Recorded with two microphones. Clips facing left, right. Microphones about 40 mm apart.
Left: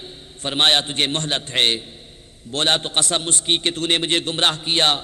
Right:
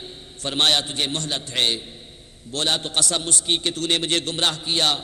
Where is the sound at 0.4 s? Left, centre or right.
Left.